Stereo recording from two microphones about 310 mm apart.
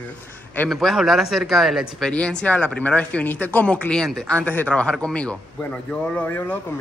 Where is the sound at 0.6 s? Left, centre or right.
Centre.